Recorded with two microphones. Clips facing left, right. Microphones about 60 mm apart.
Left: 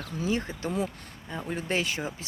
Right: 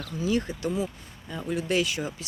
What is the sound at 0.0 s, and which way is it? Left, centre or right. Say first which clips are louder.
Speech: right 2 dB; left.